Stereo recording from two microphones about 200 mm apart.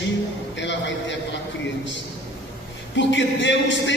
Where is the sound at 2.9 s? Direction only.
65° left (ahead or behind).